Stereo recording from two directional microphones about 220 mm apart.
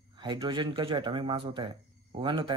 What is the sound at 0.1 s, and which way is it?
Speech, 20° right (ahead or behind).